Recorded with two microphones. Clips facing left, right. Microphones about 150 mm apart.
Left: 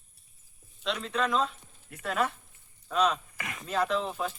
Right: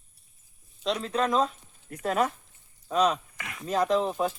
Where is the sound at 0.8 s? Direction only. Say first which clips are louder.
Right 3 dB; 40° right (ahead or behind).